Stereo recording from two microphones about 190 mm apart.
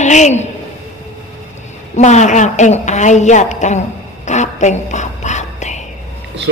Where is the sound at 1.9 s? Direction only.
40° left (ahead or behind).